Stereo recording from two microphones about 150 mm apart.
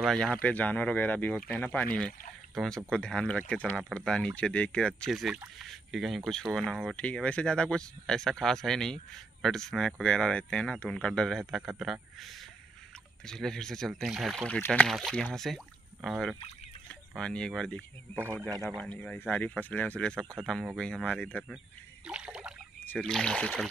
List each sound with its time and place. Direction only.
0.0 s speech: centre (ahead or behind)
18.2 s a man's voice: 15° right (ahead or behind)
18.6 s speech: centre (ahead or behind)
18.9 s speech: 10° left (ahead or behind)
22.0 s a sound: 5° right (ahead or behind)
22.8 s speech: 5° left (ahead or behind)